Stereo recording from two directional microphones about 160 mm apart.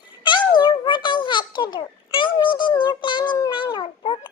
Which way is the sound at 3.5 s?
30° left (ahead or behind).